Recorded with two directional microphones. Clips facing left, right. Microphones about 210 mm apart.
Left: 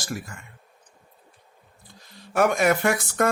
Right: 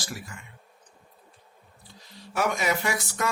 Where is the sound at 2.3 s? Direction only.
55° left (ahead or behind).